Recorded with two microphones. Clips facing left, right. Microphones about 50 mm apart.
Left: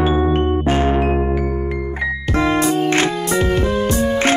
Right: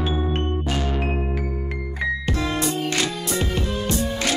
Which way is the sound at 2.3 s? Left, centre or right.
Left.